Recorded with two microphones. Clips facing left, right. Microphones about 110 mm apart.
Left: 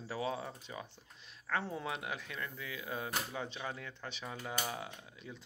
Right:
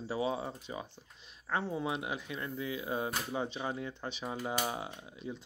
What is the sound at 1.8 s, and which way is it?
Speech, 15° right (ahead or behind).